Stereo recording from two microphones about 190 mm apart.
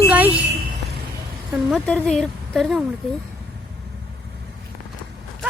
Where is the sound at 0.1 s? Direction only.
10° right (ahead or behind).